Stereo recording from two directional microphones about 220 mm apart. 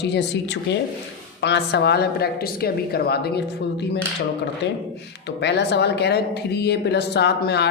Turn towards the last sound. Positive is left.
turn(degrees=50)  # may be behind; listen again after turning